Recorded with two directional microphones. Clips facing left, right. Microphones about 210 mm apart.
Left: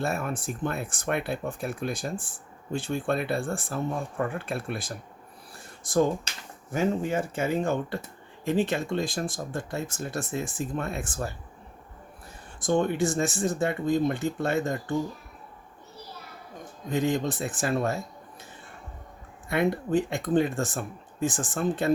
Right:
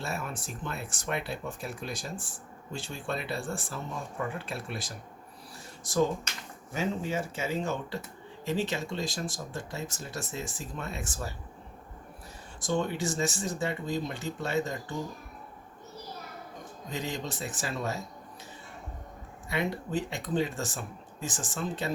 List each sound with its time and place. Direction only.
0.0 s speech: 55° left (ahead or behind)
12.5 s speech: 55° left (ahead or behind)
16.9 s speech: 55° left (ahead or behind)
19.5 s speech: 55° left (ahead or behind)